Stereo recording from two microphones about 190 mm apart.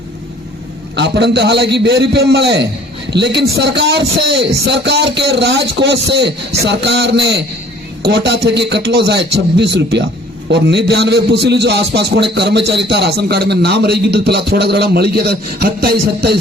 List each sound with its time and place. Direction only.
0.9 s a man's voice: 65° right (ahead or behind)